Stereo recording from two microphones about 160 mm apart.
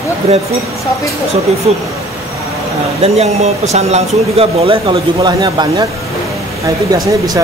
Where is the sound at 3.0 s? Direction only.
40° right (ahead or behind); by 5.9 s 25° right (ahead or behind).